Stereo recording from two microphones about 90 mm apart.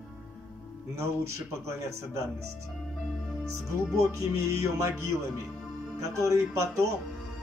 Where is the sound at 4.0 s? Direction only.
35° right (ahead or behind).